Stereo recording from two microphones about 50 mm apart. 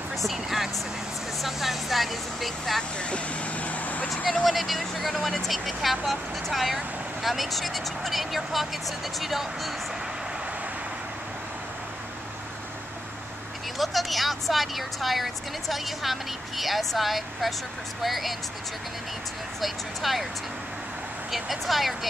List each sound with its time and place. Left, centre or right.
0.2 s vehicle: centre
1.4 s a woman's voice: centre
3.0 s vehicle: left
4.1 s a woman's voice: centre
13.7 s a woman's voice: centre
19.6 s a woman's voice: centre
21.3 s a woman's voice: centre